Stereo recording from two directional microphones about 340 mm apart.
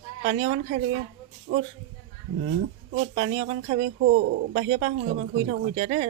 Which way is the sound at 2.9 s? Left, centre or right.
Right.